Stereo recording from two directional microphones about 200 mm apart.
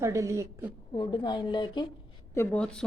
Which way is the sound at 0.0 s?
15° right (ahead or behind).